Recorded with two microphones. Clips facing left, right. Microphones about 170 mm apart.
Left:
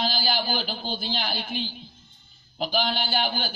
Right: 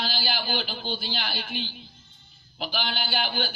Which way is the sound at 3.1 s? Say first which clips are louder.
Left 2 dB; 40° left (ahead or behind).